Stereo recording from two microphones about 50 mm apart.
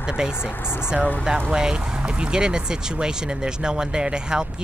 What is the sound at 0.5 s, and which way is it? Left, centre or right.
Speech, left.